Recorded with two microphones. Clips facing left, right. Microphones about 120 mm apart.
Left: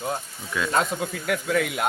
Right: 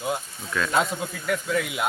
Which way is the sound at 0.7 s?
Centre (ahead or behind).